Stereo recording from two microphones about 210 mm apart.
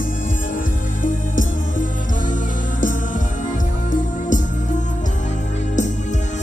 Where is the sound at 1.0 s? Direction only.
40° left (ahead or behind).